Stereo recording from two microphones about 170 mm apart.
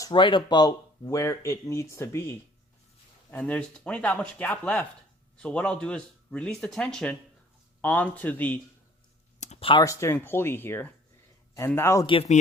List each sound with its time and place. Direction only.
0.0 s speech: 30° left (ahead or behind); by 8.5 s 10° left (ahead or behind)
9.4 s a sound: 40° left (ahead or behind)
9.8 s speech: 20° left (ahead or behind)
12.0 s speech: 35° left (ahead or behind)